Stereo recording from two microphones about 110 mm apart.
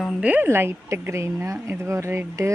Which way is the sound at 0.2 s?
15° right (ahead or behind).